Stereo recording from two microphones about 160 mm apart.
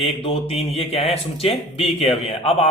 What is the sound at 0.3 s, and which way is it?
Speech, 40° left (ahead or behind).